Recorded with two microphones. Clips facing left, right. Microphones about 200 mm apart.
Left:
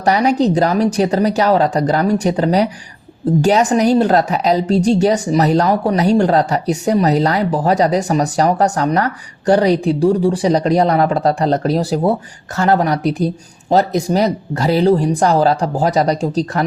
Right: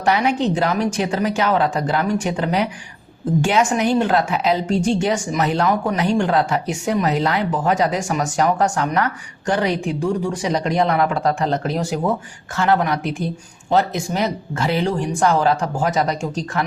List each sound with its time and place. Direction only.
0.0 s a woman's voice: 40° left (ahead or behind)